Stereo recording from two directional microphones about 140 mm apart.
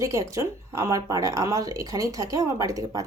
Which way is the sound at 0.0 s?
20° right (ahead or behind).